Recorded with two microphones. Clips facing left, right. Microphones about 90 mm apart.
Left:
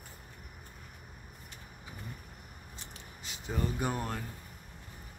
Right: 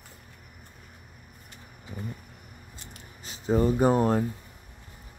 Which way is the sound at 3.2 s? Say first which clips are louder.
Right 12 dB; 35° right (ahead or behind).